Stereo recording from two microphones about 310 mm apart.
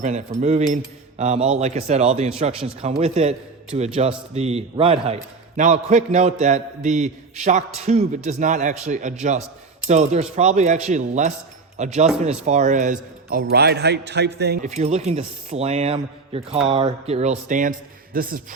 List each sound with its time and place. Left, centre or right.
0.0 s a man's voice: right